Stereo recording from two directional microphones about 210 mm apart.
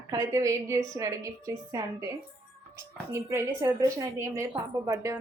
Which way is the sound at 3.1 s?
10° right (ahead or behind).